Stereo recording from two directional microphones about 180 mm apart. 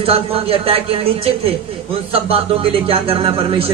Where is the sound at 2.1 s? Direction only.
30° right (ahead or behind).